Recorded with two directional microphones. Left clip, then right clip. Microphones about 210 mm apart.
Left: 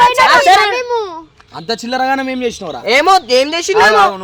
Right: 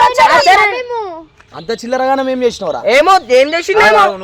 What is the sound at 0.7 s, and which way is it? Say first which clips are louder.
Speech: left 2 dB; 5° left (ahead or behind).